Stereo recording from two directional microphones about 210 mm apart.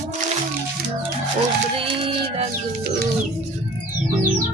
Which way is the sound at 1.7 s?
25° right (ahead or behind).